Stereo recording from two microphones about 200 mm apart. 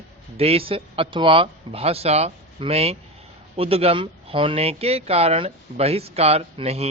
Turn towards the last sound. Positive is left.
turn(degrees=-30)  # may be behind; listen again after turning